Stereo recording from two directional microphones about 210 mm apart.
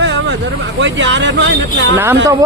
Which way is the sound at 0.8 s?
60° right (ahead or behind).